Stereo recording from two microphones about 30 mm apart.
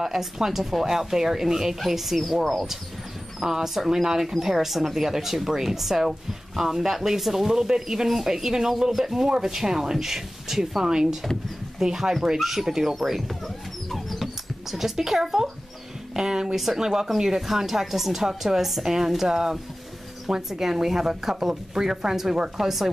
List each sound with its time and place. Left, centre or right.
0.0 s speech: centre
3.3 s speech: centre
10.9 s speech: right
11.8 s speech: centre
13.8 s dog: centre
14.7 s speech: centre
16.2 s speech: right
16.5 s speech: centre
16.8 s speech: centre